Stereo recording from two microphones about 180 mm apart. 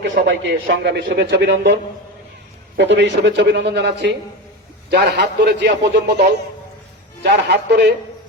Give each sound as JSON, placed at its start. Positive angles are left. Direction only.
{"t": 0.3, "sound": "a man's voice", "side_deg": -75}